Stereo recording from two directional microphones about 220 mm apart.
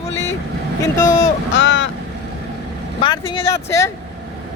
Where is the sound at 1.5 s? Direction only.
60° left (ahead or behind).